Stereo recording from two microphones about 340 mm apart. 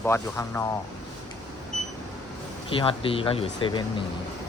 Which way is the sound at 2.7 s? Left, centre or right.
Centre.